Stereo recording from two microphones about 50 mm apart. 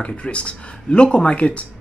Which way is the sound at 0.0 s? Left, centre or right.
Left.